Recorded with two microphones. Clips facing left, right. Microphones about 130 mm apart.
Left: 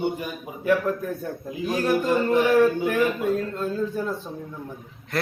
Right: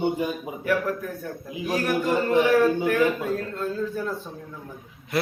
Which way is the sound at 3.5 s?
20° left (ahead or behind).